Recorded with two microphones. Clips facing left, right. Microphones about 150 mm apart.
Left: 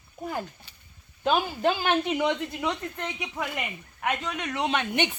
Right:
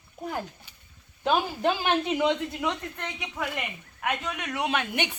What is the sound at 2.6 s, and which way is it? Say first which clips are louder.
A woman's voice: left 1 dB; 5° left (ahead or behind).